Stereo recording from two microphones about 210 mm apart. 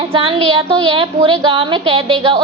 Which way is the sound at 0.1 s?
25° right (ahead or behind).